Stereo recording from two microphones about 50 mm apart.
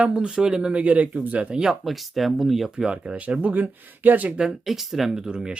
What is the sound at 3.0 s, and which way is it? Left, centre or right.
Speech, right.